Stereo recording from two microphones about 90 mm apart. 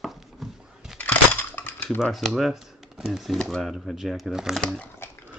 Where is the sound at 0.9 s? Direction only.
20° left (ahead or behind).